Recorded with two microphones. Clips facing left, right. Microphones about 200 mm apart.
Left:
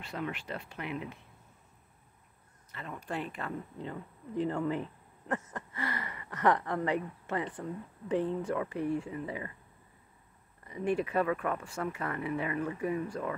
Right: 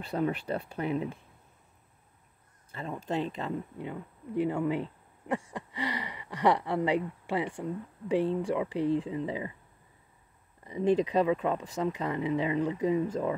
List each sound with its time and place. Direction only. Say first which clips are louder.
0.0 s speech: right 7 dB; 35° right (ahead or behind)
2.7 s speech: right 6 dB; 30° right (ahead or behind); by 8.6 s 15° right (ahead or behind)
8.6 s speech: right 4 dB; 90° right
8.9 s speech: right 5 dB; 20° right (ahead or behind)
10.6 s a sound: right 6 dB; 25° right (ahead or behind)
11.0 s speech: right 4 dB; 20° right (ahead or behind)